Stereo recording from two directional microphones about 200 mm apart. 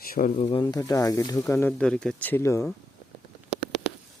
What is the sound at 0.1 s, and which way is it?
Speech, 40° left (ahead or behind).